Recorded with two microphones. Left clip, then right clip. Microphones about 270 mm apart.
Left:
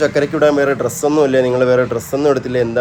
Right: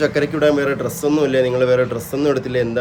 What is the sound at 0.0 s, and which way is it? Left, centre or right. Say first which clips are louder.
Speech: left 3 dB; centre.